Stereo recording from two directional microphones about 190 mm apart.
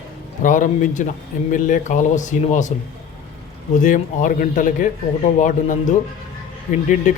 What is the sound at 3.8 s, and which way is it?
A man's voice, 45° left (ahead or behind).